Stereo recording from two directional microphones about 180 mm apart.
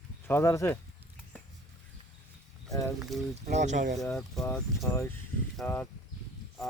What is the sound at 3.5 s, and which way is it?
Speech, 40° right (ahead or behind).